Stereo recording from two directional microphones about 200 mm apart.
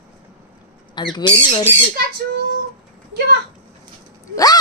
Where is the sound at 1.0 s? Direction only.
20° left (ahead or behind).